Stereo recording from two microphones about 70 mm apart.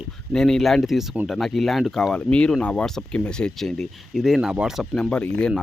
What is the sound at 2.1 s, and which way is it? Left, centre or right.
Speech, centre.